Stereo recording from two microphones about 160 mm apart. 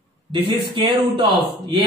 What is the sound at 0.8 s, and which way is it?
Speech, 35° right (ahead or behind).